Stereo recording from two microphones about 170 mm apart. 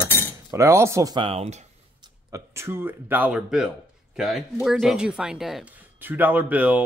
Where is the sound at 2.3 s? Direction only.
15° right (ahead or behind).